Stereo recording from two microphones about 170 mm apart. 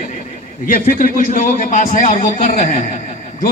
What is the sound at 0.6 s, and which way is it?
A man's voice, 50° left (ahead or behind).